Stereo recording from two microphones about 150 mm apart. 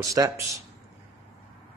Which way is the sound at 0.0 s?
20° right (ahead or behind).